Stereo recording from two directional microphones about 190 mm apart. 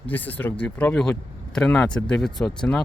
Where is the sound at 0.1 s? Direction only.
10° left (ahead or behind).